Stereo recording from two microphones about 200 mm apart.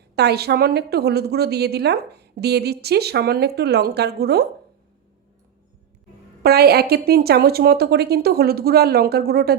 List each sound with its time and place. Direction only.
0.2 s a woman's voice: 55° right (ahead or behind)
6.4 s a woman's voice: 50° right (ahead or behind)